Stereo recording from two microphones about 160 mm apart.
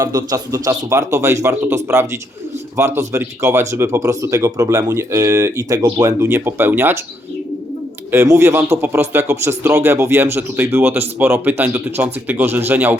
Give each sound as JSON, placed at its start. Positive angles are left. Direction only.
{"t": 0.0, "sound": "speech", "side_deg": -20}
{"t": 8.1, "sound": "speech", "side_deg": -15}